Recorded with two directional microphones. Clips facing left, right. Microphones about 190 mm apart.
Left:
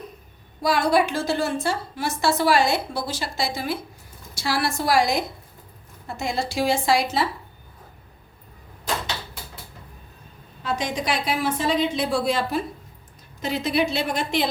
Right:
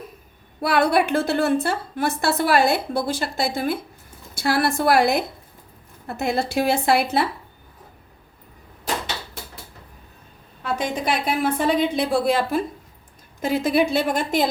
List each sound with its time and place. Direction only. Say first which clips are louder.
0.6 s a woman's voice: right 1 dB; 60° right (ahead or behind)
10.6 s a woman's voice: right 2 dB; 55° right (ahead or behind)